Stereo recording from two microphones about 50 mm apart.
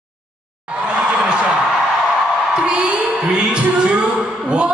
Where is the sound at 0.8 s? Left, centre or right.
Centre.